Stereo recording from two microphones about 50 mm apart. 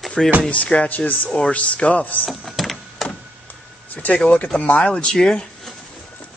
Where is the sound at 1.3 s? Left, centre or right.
Left.